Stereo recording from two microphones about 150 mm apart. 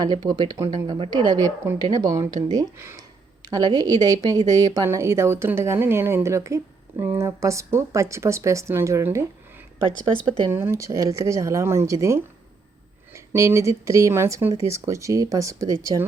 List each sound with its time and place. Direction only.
0.0 s a woman's voice: 25° right (ahead or behind)
10.5 s a woman's voice: 15° right (ahead or behind)